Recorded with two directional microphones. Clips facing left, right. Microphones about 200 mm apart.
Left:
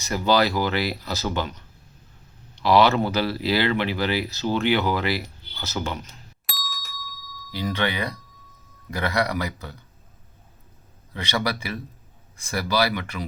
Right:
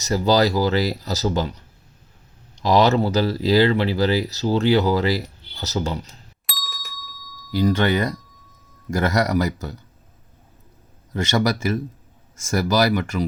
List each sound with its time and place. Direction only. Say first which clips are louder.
0.1 s speech: right 3 dB; 40° right (ahead or behind)
6.4 s doorbell: even; centre (ahead or behind)
7.5 s speech: right 7 dB; 45° right (ahead or behind)
11.1 s speech: right 6 dB; 45° right (ahead or behind)